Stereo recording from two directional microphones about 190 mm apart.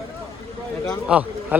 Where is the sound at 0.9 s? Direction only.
5° right (ahead or behind).